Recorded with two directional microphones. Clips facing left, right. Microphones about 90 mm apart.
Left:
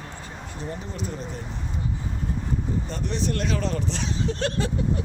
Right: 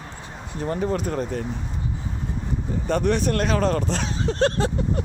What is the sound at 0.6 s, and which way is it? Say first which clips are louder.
Speech: right 10 dB; 60° right (ahead or behind).